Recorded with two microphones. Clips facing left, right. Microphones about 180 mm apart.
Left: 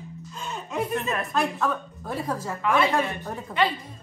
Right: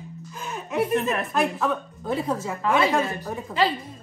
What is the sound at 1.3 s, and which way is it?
A woman's voice, centre (ahead or behind).